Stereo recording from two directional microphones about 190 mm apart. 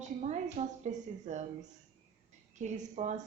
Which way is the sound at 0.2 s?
35° right (ahead or behind).